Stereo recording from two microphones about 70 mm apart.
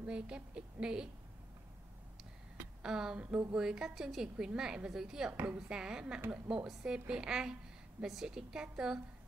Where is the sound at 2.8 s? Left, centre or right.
Centre.